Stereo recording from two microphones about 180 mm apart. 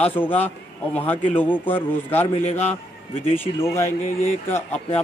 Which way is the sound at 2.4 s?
35° left (ahead or behind).